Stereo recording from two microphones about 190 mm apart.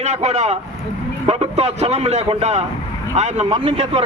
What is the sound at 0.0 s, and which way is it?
A man's voice, 35° right (ahead or behind).